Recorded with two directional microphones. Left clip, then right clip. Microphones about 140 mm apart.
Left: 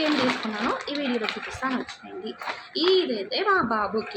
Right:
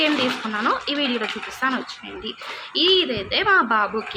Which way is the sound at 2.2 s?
10° right (ahead or behind).